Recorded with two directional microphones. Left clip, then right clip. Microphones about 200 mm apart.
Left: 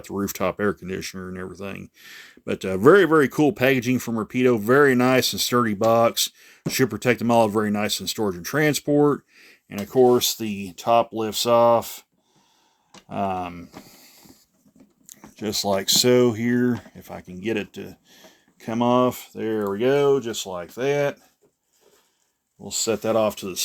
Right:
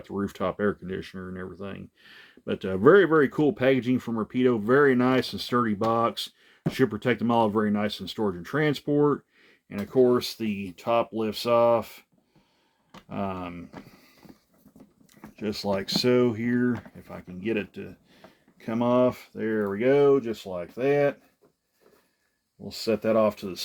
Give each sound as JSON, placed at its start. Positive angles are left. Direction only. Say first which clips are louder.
{"t": 0.0, "sound": "speech", "louder": "left 4 dB", "side_deg": 45}
{"t": 13.1, "sound": "speech", "louder": "left 7 dB", "side_deg": 40}
{"t": 22.6, "sound": "speech", "louder": "left 3 dB", "side_deg": 40}